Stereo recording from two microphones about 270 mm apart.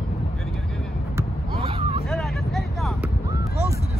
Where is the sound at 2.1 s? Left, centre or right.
Centre.